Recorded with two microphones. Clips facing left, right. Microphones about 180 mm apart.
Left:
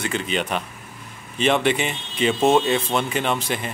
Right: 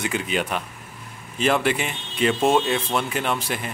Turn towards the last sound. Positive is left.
turn(degrees=-5)  # may be behind; listen again after turning